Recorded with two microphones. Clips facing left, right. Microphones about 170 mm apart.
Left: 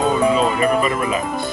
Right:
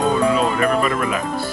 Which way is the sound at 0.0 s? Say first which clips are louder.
Left 1 dB; centre (ahead or behind).